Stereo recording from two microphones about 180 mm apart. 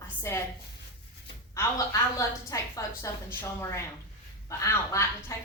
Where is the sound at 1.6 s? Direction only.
20° left (ahead or behind).